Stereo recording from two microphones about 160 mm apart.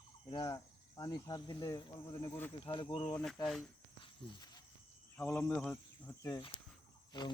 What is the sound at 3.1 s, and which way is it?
Speech, 10° left (ahead or behind).